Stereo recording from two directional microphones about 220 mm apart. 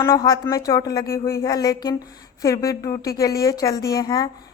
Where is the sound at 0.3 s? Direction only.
15° left (ahead or behind).